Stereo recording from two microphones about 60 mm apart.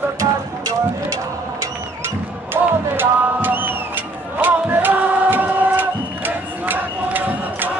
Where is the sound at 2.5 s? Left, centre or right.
Right.